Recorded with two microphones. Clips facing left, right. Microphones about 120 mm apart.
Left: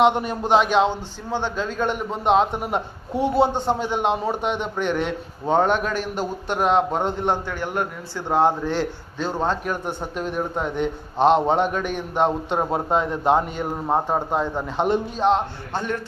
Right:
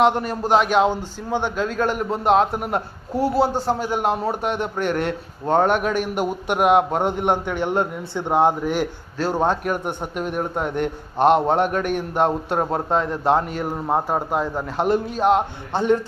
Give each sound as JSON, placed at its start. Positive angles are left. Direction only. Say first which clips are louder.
{"t": 0.0, "sound": "a man's voice", "louder": "even", "side_deg": 0}
{"t": 15.7, "sound": "speech", "louder": "right 8 dB", "side_deg": -25}